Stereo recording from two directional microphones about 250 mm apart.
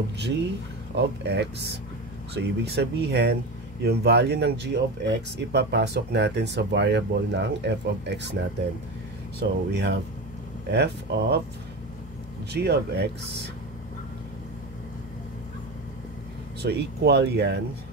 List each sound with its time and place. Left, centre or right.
0.9 s speech: right
9.4 s speech: right
12.5 s speech: right
16.6 s speech: right